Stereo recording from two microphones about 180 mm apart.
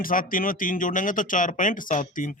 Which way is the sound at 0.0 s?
50° left (ahead or behind).